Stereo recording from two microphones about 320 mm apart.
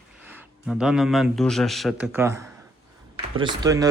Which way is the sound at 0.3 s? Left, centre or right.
Centre.